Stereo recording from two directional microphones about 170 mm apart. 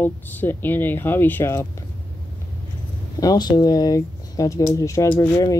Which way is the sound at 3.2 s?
25° left (ahead or behind).